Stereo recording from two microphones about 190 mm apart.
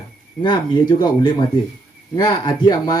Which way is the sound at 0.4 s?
25° left (ahead or behind).